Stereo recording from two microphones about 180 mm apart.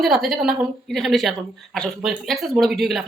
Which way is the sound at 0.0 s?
Centre (ahead or behind).